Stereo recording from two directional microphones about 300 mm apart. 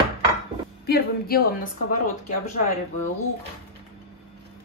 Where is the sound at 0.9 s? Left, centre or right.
Left.